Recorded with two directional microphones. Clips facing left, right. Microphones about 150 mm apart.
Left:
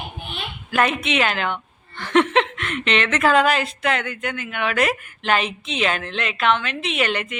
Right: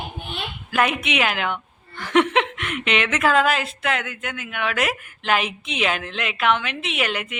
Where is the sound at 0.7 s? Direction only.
10° right (ahead or behind).